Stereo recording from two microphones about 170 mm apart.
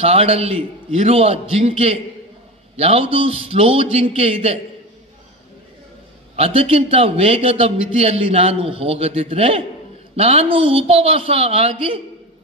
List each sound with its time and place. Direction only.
0.0 s a man's voice: 35° right (ahead or behind)
6.3 s a man's voice: 35° right (ahead or behind)